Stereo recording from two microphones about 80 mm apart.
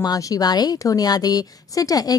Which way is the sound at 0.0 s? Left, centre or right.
Left.